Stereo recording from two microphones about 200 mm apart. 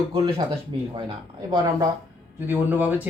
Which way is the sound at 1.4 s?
20° right (ahead or behind).